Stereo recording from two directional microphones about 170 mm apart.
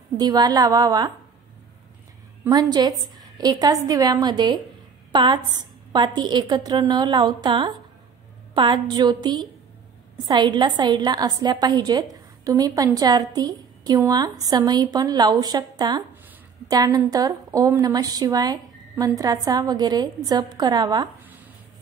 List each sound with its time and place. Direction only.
0.2 s a woman's voice: 25° right (ahead or behind)
2.7 s a woman's voice: 25° right (ahead or behind)